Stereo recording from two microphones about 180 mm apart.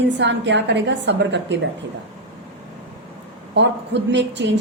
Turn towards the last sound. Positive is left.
turn(degrees=-90)